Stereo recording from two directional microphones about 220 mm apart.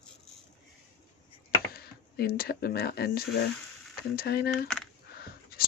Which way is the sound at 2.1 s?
45° left (ahead or behind).